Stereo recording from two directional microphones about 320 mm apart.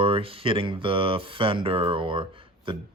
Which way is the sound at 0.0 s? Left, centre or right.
Centre.